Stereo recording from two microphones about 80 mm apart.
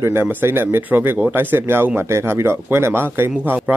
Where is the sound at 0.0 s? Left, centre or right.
Right.